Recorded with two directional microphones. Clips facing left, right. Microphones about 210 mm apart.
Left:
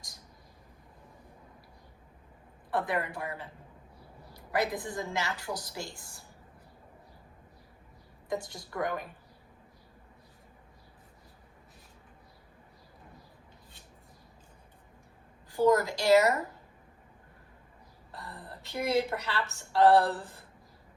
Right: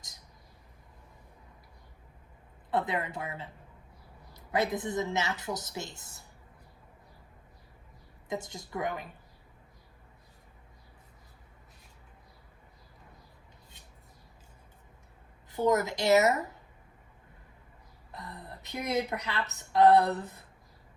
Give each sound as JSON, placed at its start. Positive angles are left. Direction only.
{"t": 2.6, "sound": "a woman's voice", "side_deg": -20}
{"t": 8.3, "sound": "a woman's voice", "side_deg": -20}
{"t": 15.4, "sound": "a woman's voice", "side_deg": -20}
{"t": 18.1, "sound": "a woman's voice", "side_deg": -20}